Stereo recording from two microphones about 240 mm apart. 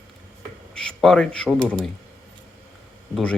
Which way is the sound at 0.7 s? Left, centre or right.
Centre.